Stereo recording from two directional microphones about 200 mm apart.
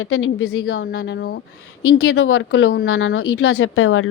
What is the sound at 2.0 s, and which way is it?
Speech, 90° left.